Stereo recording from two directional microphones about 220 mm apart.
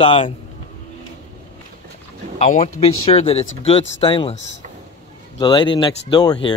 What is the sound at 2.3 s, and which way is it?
A man's voice, 30° left (ahead or behind).